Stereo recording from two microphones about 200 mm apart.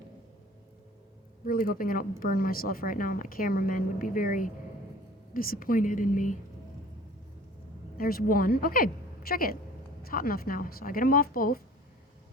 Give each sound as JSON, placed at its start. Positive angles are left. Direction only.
{"t": 1.5, "sound": "a woman's voice", "side_deg": 45}
{"t": 7.9, "sound": "a woman's voice", "side_deg": 45}